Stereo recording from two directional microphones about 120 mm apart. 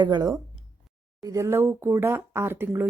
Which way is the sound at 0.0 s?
35° right (ahead or behind).